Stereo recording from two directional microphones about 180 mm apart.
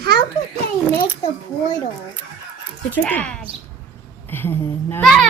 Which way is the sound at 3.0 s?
5° left (ahead or behind).